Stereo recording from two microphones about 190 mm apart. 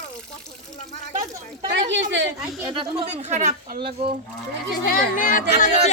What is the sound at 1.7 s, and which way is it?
Speech, 75° right (ahead or behind).